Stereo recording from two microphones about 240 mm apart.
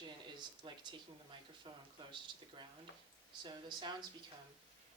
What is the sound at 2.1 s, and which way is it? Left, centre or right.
Speech, centre.